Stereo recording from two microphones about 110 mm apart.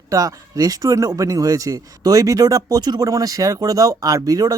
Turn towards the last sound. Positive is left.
turn(degrees=-35)  # may be behind; listen again after turning